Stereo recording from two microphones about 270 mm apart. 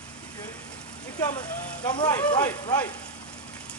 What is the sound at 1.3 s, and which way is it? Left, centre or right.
Speech, centre.